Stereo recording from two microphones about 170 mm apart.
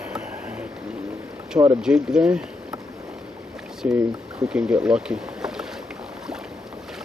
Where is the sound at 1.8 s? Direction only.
5° right (ahead or behind).